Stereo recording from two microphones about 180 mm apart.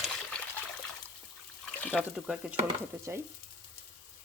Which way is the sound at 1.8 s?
5° left (ahead or behind).